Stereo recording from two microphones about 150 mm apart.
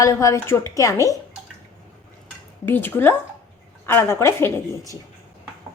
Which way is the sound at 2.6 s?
15° left (ahead or behind).